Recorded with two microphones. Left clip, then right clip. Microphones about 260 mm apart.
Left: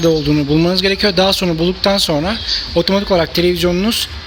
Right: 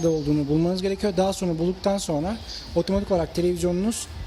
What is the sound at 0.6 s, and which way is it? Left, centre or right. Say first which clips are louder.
Speech: left 11 dB; centre.